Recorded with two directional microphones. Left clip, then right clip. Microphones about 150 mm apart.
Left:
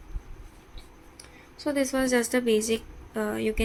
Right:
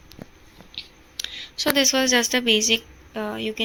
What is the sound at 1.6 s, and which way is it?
A woman's voice, 15° right (ahead or behind).